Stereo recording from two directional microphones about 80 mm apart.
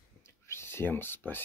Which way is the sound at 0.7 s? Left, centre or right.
Left.